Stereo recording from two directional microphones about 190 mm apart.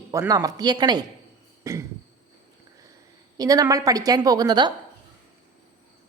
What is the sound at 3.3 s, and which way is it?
A woman's voice, 20° right (ahead or behind).